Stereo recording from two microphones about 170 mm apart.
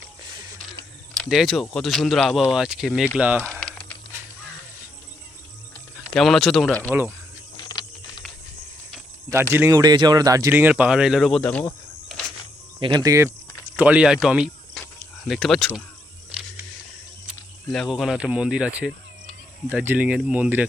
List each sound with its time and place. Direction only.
0.2 s a sound: 25° right (ahead or behind)
1.1 s speech: centre (ahead or behind)
3.4 s typing: 5° left (ahead or behind)
6.1 s speech: centre (ahead or behind)
7.5 s a sound: 25° left (ahead or behind)
9.3 s speech: 10° right (ahead or behind); by 12.2 s 5° left (ahead or behind)
12.8 s speech: 25° right (ahead or behind)
13.7 s speech: 5° right (ahead or behind)
17.7 s speech: centre (ahead or behind)